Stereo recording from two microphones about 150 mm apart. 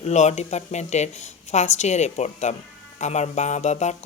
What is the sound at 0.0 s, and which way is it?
Speech, 50° left (ahead or behind).